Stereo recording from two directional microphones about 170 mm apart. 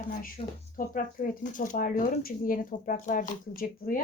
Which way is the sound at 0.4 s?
35° left (ahead or behind).